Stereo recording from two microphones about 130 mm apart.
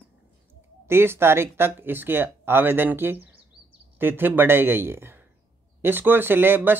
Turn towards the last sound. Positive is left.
turn(degrees=-15)  # may be behind; listen again after turning